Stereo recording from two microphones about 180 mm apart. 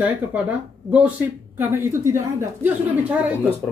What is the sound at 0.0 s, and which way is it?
Speech, 10° right (ahead or behind).